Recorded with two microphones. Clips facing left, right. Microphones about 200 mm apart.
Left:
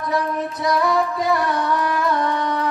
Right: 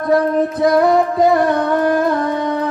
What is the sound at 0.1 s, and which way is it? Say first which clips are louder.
Music: right 10 dB; 55° right (ahead or behind).